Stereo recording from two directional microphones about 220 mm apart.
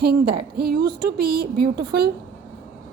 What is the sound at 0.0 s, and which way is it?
A woman's voice, 45° right (ahead or behind).